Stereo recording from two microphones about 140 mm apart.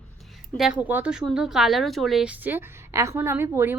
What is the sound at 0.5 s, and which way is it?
A woman's voice, 5° right (ahead or behind).